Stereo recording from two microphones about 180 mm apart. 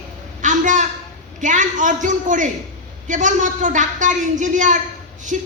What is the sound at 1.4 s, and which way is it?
A woman's voice, 45° right (ahead or behind).